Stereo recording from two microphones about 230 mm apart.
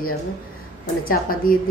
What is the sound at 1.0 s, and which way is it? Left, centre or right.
Speech, left.